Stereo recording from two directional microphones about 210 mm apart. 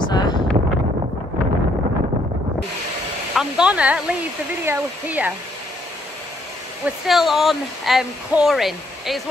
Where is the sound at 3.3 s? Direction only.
5° right (ahead or behind).